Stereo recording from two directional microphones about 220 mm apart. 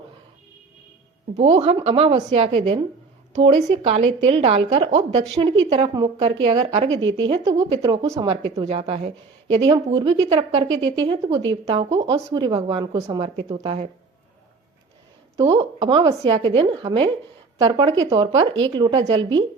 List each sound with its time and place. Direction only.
1.4 s a woman's voice: 30° right (ahead or behind)
9.6 s a woman's voice: 20° right (ahead or behind)
10.8 s speech: 60° right (ahead or behind)
11.0 s a woman's voice: 20° right (ahead or behind)
15.4 s a woman's voice: 25° right (ahead or behind)